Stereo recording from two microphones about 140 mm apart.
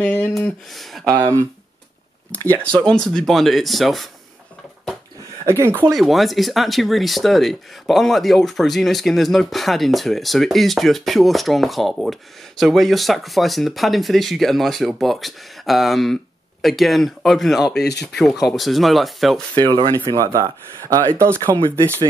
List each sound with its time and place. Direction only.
0.0 s speech: 10° left (ahead or behind)
2.5 s speech: 5° left (ahead or behind)
5.4 s speech: 20° right (ahead or behind)
5.9 s speech: centre (ahead or behind)
19.5 s speech: 30° right (ahead or behind)